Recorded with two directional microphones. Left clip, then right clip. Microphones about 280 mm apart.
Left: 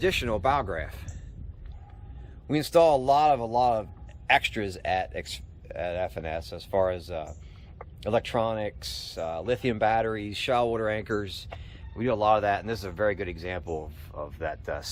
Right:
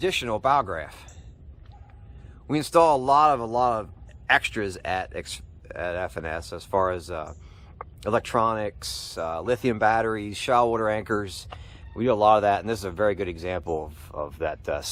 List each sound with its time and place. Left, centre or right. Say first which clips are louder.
0.0 s speech: right 1 dB; centre
2.5 s speech: right 2 dB; centre
13.7 s speech: right 5 dB; right
14.2 s speech: right 4 dB; right